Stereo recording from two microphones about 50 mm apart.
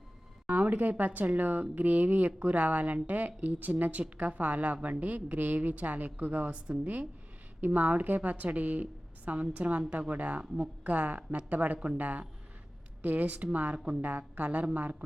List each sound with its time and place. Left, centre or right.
0.4 s a woman's voice: right